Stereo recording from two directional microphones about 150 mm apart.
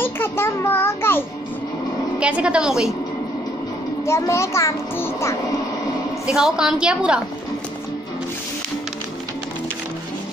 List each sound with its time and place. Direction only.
0.0 s a sound: 15° left (ahead or behind)
2.1 s a woman's voice: 5° right (ahead or behind)
4.0 s a child's voice: 20° left (ahead or behind)
6.2 s a woman's voice: 5° right (ahead or behind)